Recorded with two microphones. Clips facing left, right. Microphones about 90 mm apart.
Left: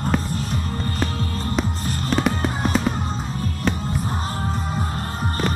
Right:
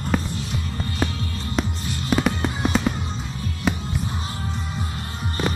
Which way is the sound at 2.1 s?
Centre (ahead or behind).